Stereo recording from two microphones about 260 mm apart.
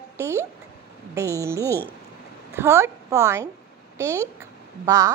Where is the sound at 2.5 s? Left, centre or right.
Centre.